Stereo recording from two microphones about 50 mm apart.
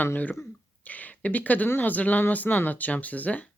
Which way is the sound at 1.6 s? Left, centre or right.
Left.